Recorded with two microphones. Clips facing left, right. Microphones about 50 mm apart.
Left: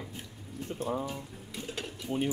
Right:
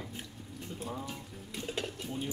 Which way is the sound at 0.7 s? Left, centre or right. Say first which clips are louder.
Left 7 dB; left.